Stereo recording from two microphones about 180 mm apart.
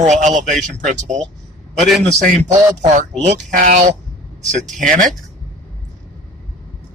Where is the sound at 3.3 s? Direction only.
45° right (ahead or behind).